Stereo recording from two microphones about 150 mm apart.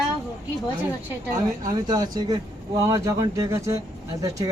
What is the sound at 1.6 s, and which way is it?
Speech, 25° right (ahead or behind).